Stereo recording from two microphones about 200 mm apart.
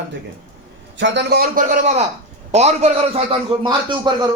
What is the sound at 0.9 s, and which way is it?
A man's voice, 65° right (ahead or behind).